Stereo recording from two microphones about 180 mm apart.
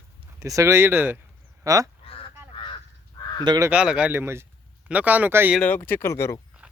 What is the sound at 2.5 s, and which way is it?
Crow, 25° left (ahead or behind).